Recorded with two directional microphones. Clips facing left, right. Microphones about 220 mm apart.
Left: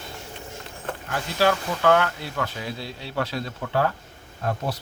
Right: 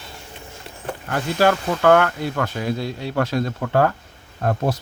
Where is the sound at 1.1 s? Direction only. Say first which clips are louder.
Right 4 dB; 50° right (ahead or behind).